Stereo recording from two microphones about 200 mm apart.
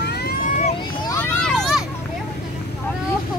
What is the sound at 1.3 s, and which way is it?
Vehicle, centre (ahead or behind).